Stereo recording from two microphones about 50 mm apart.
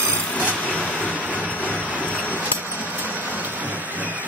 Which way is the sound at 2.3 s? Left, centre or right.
Right.